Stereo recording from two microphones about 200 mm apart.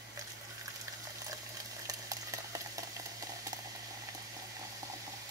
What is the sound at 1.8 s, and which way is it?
Boiling, 15° right (ahead or behind).